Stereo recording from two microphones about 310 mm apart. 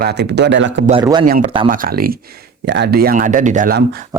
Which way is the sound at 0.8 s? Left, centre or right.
Centre.